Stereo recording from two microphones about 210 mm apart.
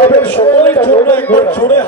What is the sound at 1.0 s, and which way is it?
Speech, 10° left (ahead or behind).